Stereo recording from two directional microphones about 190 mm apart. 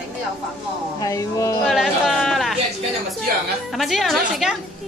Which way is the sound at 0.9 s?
20° left (ahead or behind).